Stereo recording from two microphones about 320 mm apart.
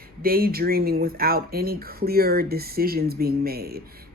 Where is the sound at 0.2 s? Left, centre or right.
Right.